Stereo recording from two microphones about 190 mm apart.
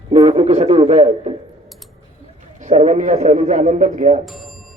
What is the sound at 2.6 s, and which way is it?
A man's voice, 40° right (ahead or behind).